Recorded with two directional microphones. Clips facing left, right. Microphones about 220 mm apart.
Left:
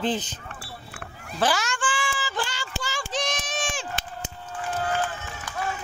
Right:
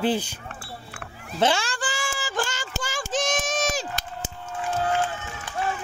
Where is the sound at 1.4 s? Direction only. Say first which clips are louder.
Right 2 dB; 30° right (ahead or behind).